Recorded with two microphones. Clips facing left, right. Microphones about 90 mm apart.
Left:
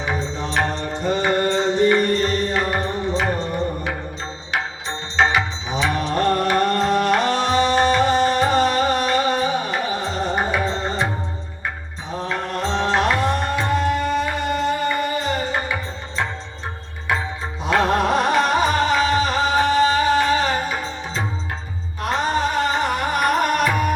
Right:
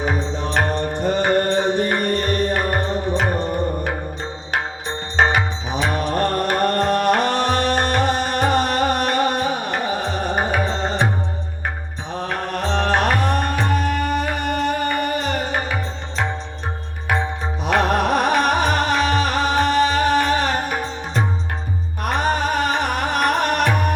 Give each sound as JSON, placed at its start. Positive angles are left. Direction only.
{"t": 0.0, "sound": "music", "side_deg": -55}
{"t": 5.1, "sound": "music", "side_deg": -50}
{"t": 12.1, "sound": "music", "side_deg": -60}
{"t": 17.9, "sound": "music", "side_deg": -65}